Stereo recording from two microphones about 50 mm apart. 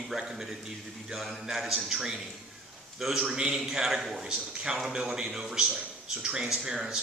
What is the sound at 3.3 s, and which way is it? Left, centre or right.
A man's voice, centre.